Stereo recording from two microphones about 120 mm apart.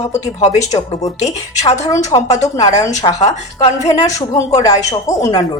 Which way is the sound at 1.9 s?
30° left (ahead or behind).